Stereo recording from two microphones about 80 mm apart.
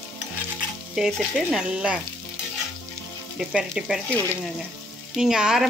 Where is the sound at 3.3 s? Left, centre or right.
Centre.